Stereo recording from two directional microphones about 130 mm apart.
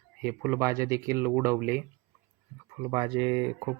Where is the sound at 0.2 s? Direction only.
15° right (ahead or behind).